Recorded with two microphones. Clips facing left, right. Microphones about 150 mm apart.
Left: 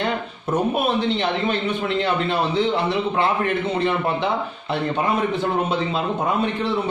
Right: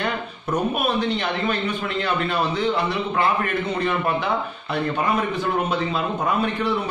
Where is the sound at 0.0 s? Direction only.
25° left (ahead or behind).